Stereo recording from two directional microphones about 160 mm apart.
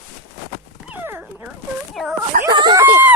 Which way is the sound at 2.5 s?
30° right (ahead or behind).